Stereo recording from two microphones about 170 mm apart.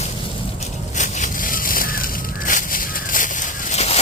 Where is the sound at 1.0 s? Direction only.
45° left (ahead or behind).